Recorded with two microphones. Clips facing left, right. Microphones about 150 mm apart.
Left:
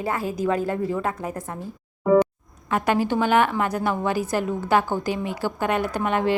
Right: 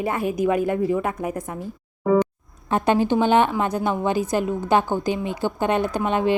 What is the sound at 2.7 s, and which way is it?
A woman's voice, 25° right (ahead or behind).